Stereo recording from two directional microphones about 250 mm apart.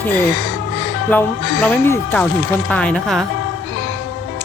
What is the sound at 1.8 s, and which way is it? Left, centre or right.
Speech, centre.